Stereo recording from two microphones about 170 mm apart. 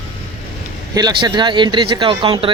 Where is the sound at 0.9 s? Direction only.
25° right (ahead or behind).